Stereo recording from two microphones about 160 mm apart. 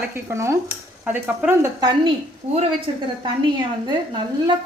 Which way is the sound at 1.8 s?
30° right (ahead or behind).